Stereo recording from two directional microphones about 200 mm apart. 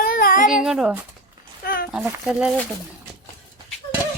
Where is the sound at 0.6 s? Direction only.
5° right (ahead or behind).